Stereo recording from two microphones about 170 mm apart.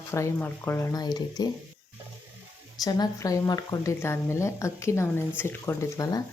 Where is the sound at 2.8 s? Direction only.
25° left (ahead or behind).